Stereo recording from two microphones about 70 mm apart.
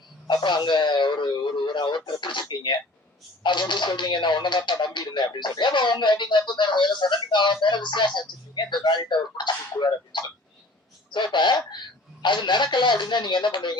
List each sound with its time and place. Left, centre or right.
0.3 s speech: left